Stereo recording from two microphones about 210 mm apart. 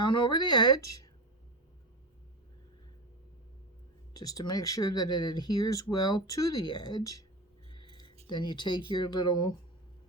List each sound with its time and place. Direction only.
0.0 s speech: 20° left (ahead or behind)
4.2 s speech: 20° left (ahead or behind)
8.3 s speech: 20° left (ahead or behind)